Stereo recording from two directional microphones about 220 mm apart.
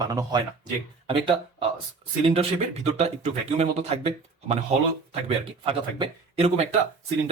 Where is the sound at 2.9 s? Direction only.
30° right (ahead or behind).